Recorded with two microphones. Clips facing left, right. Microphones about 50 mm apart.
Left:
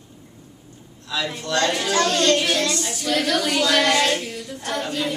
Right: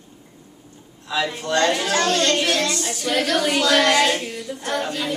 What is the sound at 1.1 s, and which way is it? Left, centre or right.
Speech, centre.